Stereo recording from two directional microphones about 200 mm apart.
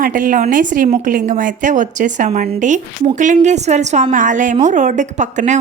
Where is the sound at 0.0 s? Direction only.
40° right (ahead or behind).